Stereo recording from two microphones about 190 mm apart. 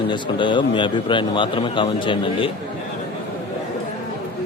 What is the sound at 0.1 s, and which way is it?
A man's voice, 25° left (ahead or behind).